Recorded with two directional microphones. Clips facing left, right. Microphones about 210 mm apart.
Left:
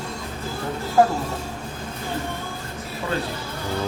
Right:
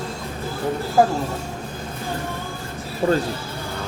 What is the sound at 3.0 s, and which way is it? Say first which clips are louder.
Music: right 8 dB; 40° right (ahead or behind).